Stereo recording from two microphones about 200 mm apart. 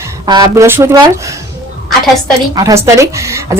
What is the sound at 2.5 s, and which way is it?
Speech, 15° right (ahead or behind).